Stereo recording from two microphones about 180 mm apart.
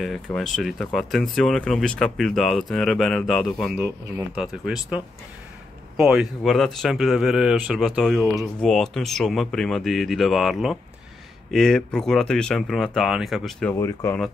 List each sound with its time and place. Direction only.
0.0 s speech: centre (ahead or behind)
13.7 s speech: 15° left (ahead or behind)